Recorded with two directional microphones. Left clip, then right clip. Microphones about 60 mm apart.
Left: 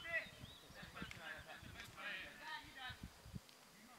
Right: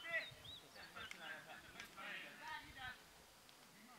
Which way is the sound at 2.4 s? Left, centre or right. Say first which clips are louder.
Even; centre.